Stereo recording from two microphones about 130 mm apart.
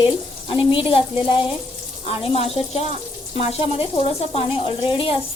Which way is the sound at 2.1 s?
50° left (ahead or behind).